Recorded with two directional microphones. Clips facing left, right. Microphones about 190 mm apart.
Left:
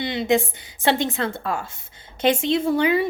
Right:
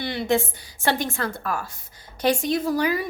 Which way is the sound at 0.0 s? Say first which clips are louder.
Left 2 dB; 20° left (ahead or behind).